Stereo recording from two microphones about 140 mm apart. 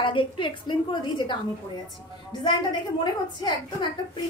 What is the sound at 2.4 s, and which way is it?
A woman's voice, 35° left (ahead or behind).